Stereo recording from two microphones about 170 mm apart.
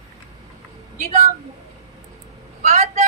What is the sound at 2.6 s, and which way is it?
Vehicle, 50° right (ahead or behind).